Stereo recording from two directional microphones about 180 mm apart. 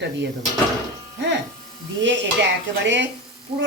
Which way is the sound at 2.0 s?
90° right.